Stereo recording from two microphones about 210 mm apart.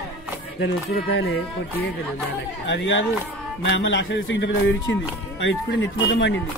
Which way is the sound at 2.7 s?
60° left (ahead or behind).